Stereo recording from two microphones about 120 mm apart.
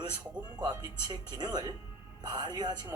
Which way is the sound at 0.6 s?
35° right (ahead or behind).